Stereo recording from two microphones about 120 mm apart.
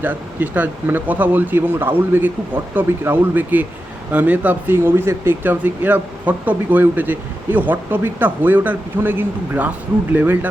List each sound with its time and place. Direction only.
0.0 s speech: 15° right (ahead or behind)